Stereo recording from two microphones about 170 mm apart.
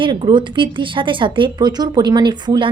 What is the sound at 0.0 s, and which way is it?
Speech, 30° right (ahead or behind).